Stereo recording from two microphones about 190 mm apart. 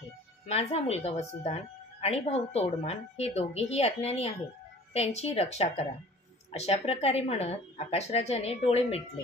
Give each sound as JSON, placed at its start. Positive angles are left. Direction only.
{"t": 0.5, "sound": "a woman's voice", "side_deg": 35}